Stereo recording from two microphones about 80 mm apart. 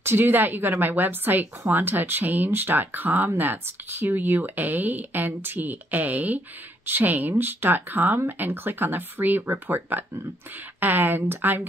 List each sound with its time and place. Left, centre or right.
0.0 s a woman's voice: right